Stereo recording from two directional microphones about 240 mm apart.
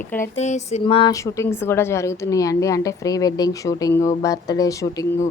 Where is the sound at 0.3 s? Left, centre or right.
Left.